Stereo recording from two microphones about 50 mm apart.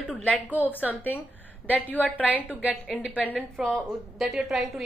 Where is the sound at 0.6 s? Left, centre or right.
Right.